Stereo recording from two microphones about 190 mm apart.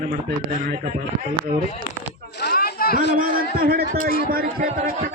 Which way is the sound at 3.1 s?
50° right (ahead or behind).